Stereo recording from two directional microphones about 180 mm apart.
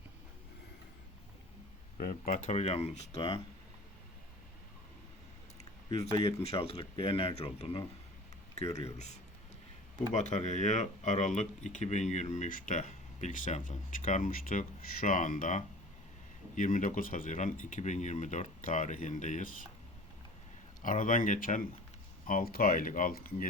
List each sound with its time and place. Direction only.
2.0 s speech: 50° left (ahead or behind)
3.2 s speech: 25° left (ahead or behind)
6.2 s speech: 35° left (ahead or behind)
20.8 s speech: 45° left (ahead or behind)